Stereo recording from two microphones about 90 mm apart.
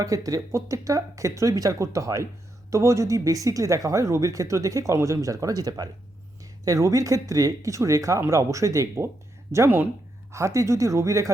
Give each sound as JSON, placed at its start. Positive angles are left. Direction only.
{"t": 0.0, "sound": "speech", "side_deg": -40}
{"t": 10.3, "sound": "speech", "side_deg": -35}